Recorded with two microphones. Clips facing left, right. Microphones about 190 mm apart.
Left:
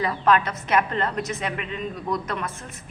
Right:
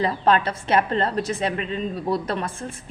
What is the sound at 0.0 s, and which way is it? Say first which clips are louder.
A woman's voice: right 1 dB; 30° right (ahead or behind).